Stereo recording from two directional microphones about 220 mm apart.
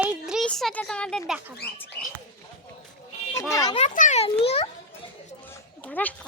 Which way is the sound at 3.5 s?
15° left (ahead or behind).